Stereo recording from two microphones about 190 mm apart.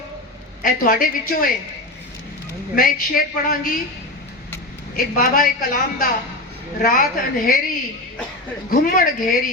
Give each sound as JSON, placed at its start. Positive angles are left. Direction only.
{"t": 0.6, "sound": "a woman's voice", "side_deg": 45}
{"t": 2.7, "sound": "a woman's voice", "side_deg": 50}
{"t": 4.9, "sound": "a woman's voice", "side_deg": 50}
{"t": 8.7, "sound": "a woman's voice", "side_deg": 45}